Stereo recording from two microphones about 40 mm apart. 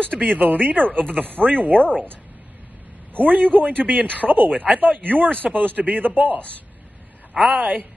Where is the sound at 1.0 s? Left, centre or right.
Left.